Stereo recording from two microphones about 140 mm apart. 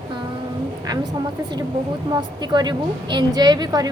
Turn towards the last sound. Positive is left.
turn(degrees=-30)  # may be behind; listen again after turning